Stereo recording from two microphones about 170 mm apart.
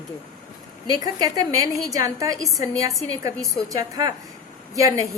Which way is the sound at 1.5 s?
20° right (ahead or behind).